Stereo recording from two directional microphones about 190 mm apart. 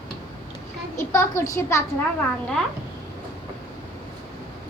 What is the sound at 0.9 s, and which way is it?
Speech, 15° left (ahead or behind).